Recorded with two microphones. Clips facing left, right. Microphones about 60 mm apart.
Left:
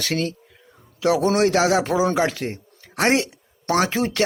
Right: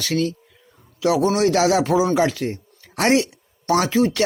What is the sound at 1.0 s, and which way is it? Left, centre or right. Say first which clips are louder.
Speech: even; left.